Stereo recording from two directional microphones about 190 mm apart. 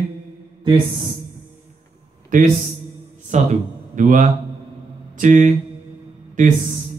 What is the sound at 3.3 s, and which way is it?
Speech, 40° right (ahead or behind).